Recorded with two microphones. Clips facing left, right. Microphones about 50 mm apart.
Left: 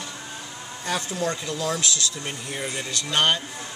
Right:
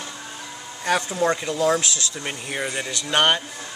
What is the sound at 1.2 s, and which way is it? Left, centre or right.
Speech, right.